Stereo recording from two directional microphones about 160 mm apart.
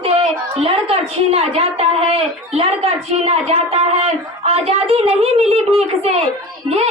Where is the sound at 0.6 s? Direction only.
40° right (ahead or behind).